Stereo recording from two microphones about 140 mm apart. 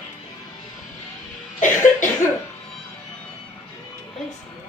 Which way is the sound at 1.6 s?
65° left (ahead or behind).